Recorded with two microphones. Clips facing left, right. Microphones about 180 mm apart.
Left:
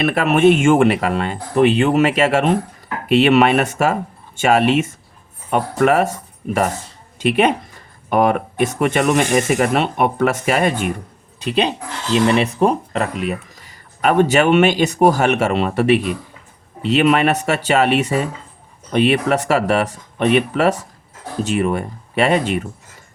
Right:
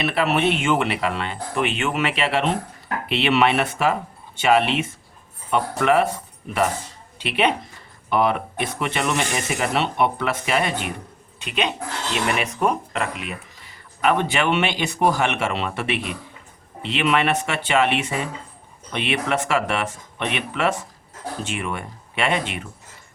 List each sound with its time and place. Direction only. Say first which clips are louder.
0.0 s speech: left 7 dB; 50° left (ahead or behind)
7.2 s speech: left 6 dB; 45° left (ahead or behind)
11.3 s speech: left 6 dB; 35° left (ahead or behind)